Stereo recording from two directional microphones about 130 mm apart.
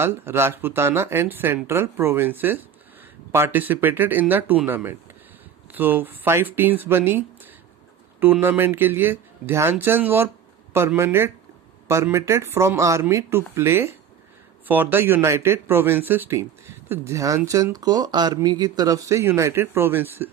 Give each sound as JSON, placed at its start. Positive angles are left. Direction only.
{"t": 0.0, "sound": "speech", "side_deg": -20}